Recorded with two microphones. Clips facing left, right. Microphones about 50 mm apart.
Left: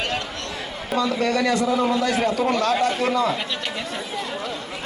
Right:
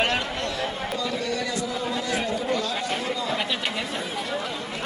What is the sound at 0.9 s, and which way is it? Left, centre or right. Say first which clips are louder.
A man's voice: left 10 dB; left.